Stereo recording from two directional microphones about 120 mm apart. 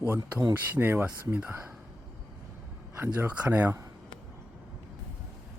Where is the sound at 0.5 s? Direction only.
15° right (ahead or behind).